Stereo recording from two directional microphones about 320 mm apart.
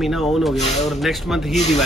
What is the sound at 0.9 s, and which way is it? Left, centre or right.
Speech, centre.